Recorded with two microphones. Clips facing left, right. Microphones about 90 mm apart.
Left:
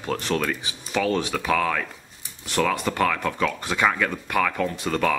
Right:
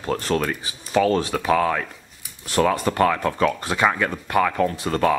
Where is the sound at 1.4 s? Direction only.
20° right (ahead or behind).